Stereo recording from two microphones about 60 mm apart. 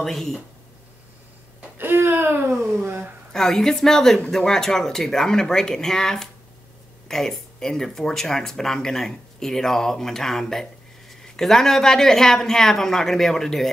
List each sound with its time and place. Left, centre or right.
0.0 s a woman's voice: centre
2.0 s speech: right
3.3 s a woman's voice: centre